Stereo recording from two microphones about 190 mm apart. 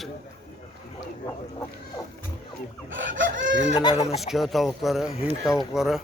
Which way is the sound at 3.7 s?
25° left (ahead or behind).